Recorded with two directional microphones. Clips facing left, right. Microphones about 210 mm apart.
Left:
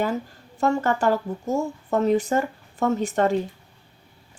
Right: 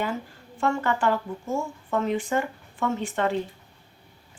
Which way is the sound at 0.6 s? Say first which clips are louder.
Left 3 dB; 40° left (ahead or behind).